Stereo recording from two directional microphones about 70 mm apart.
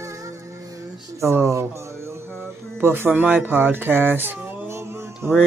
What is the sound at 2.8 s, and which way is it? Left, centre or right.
Speech, right.